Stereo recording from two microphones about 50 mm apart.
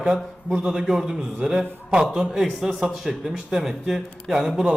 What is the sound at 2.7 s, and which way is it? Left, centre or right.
A man's voice, centre.